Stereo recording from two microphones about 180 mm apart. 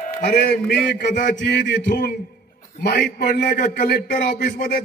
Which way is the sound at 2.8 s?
65° left (ahead or behind).